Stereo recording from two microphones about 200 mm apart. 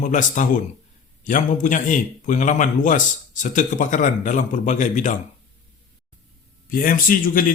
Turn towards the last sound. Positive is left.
turn(degrees=45)  # may be behind; listen again after turning